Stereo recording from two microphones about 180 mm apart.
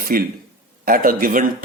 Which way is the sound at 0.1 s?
55° right (ahead or behind).